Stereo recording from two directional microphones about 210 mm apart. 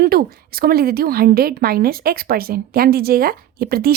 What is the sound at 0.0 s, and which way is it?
A woman's voice, 45° right (ahead or behind).